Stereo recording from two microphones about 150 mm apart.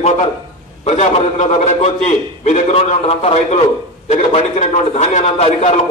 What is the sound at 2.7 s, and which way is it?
A man's voice, 40° left (ahead or behind).